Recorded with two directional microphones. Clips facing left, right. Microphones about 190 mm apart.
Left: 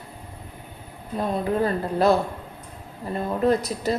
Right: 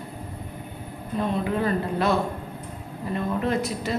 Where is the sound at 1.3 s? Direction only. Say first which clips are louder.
Left 3 dB; 35° left (ahead or behind).